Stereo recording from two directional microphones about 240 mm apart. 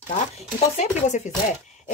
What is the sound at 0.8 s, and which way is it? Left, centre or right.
Speech, left.